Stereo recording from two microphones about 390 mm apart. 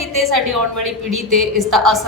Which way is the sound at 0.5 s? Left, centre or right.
Right.